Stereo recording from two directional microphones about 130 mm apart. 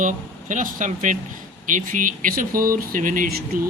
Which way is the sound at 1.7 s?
90° right.